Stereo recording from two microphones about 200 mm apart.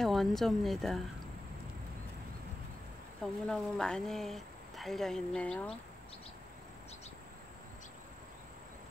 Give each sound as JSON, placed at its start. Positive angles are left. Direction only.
{"t": 0.0, "sound": "a woman's voice", "side_deg": 0}
{"t": 3.2, "sound": "a woman's voice", "side_deg": 5}